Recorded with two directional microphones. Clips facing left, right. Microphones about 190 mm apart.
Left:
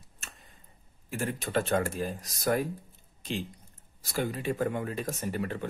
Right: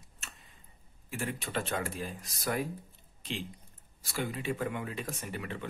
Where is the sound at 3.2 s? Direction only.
45° left (ahead or behind).